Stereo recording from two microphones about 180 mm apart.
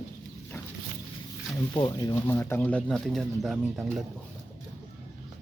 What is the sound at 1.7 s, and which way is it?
Speech, 20° left (ahead or behind).